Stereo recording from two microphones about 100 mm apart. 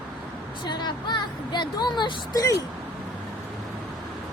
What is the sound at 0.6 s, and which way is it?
Speech, 50° left (ahead or behind).